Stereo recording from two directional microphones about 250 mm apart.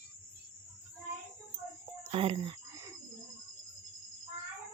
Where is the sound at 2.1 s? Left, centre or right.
Right.